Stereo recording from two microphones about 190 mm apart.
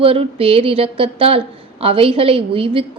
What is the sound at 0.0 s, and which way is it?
A woman's voice, 30° right (ahead or behind).